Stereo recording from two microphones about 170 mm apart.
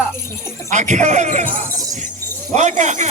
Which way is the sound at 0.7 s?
45° right (ahead or behind).